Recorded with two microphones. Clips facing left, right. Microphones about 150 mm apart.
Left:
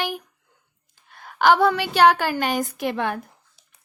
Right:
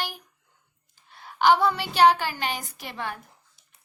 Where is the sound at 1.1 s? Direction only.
55° left (ahead or behind).